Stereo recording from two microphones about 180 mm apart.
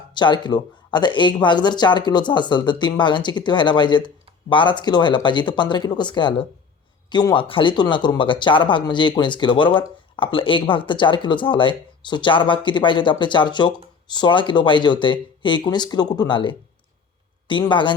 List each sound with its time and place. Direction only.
0.1 s speech: 25° left (ahead or behind)